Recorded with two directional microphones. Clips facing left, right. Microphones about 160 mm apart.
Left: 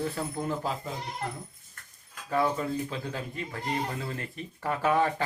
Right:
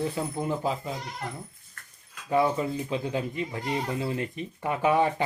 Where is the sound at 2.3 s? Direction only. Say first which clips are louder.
Right 3 dB; 15° right (ahead or behind).